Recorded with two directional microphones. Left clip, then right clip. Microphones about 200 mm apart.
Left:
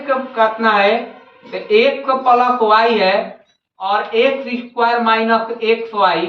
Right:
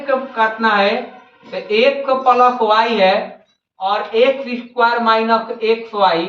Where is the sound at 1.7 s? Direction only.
15° right (ahead or behind).